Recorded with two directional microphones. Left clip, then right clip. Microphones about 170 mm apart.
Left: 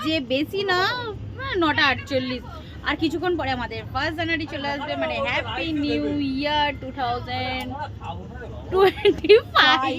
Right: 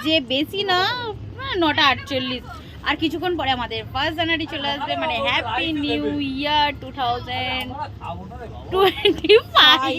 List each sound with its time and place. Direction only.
0.0 s a woman's voice: centre (ahead or behind)
8.7 s a woman's voice: centre (ahead or behind)